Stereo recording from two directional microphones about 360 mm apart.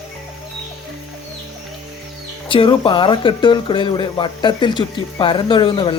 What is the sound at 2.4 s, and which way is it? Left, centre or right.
Speech, centre.